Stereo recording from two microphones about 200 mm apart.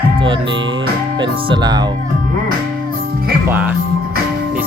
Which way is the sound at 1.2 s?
25° right (ahead or behind).